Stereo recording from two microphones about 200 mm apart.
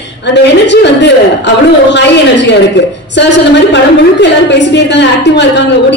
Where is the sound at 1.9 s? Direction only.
60° left (ahead or behind).